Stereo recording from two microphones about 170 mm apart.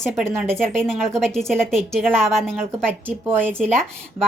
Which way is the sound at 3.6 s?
5° left (ahead or behind).